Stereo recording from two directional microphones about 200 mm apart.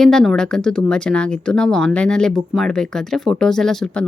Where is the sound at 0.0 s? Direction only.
Centre (ahead or behind).